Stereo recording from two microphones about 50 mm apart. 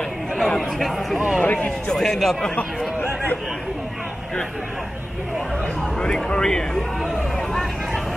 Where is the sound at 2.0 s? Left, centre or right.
Centre.